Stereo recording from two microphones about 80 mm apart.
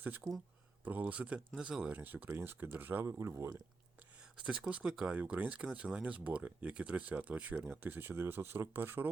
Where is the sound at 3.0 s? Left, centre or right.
Right.